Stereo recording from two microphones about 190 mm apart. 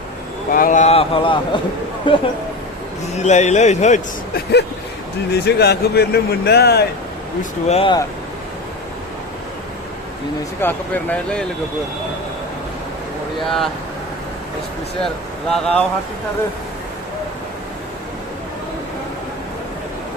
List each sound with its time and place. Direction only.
0.5 s speech: 45° left (ahead or behind); by 2.2 s 25° left (ahead or behind)
3.2 s a man's voice: 35° left (ahead or behind)
5.3 s speech: 60° left (ahead or behind)
7.7 s a man's voice: 30° left (ahead or behind)
10.6 s speech: 10° left (ahead or behind)
13.4 s speech: centre (ahead or behind)
15.0 s speech: centre (ahead or behind)